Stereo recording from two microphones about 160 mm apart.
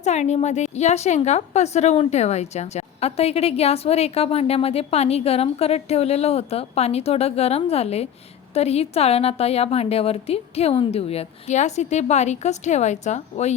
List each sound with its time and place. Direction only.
0.0 s a woman's voice: 45° left (ahead or behind)